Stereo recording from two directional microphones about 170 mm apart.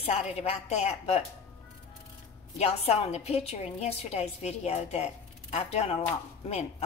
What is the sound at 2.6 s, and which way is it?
A woman's voice, 40° left (ahead or behind).